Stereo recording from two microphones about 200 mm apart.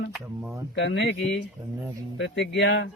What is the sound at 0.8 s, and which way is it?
Speech, 60° left (ahead or behind).